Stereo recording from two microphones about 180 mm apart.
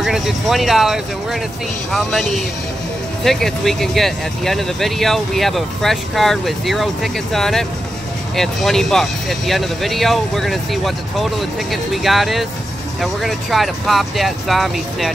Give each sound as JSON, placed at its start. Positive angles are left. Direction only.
{"t": 0.0, "sound": "speech", "side_deg": 0}